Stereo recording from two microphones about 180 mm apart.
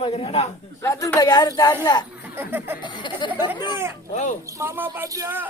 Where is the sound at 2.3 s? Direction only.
10° right (ahead or behind).